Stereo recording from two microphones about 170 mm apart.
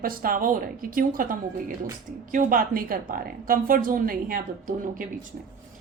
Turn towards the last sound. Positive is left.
turn(degrees=-55)  # may be behind; listen again after turning